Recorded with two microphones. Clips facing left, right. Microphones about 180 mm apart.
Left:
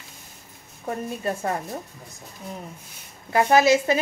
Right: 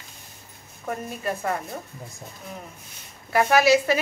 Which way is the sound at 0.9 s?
30° left (ahead or behind).